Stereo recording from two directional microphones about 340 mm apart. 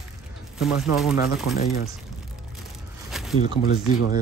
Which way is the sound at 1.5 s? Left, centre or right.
Centre.